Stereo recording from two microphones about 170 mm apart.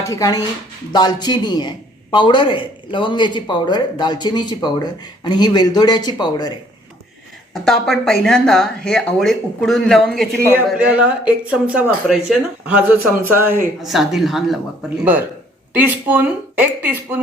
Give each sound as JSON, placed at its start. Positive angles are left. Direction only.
{"t": 0.0, "sound": "a man's voice", "side_deg": 20}
{"t": 7.5, "sound": "speech", "side_deg": 0}
{"t": 13.8, "sound": "speech", "side_deg": 0}
{"t": 15.7, "sound": "speech", "side_deg": -10}